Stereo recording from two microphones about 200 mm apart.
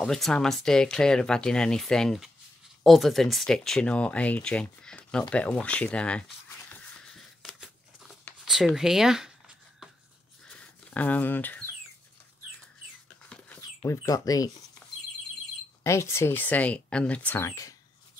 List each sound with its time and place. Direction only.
0.0 s speech: 5° left (ahead or behind)
7.4 s a sound: centre (ahead or behind)
13.8 s speech: 15° left (ahead or behind)
15.8 s speech: 15° left (ahead or behind)